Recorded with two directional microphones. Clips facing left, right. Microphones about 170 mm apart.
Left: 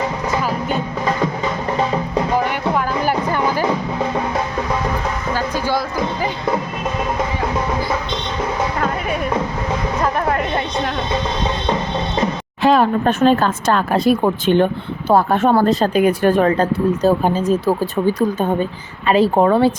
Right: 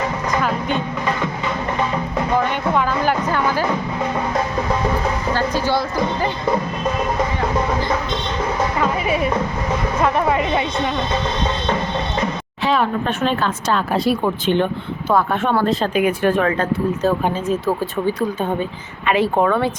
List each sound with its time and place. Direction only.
2.4 s music: 10° left (ahead or behind)
5.3 s a sound: 10° left (ahead or behind)
8.8 s music: 5° right (ahead or behind)
10.2 s chatter: centre (ahead or behind)
12.6 s speech: 45° left (ahead or behind)
19.0 s speech: 35° left (ahead or behind)